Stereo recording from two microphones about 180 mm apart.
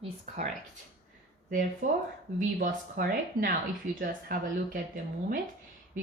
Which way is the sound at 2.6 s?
50° right (ahead or behind).